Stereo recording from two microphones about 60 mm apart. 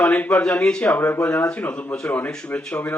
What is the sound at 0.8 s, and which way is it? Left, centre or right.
Speech, left.